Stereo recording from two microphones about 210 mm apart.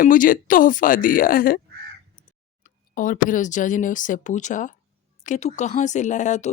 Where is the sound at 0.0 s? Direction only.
40° left (ahead or behind).